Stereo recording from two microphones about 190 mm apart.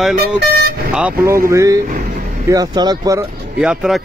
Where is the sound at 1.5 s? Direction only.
15° right (ahead or behind).